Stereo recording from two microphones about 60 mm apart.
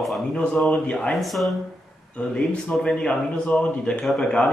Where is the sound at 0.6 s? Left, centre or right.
Centre.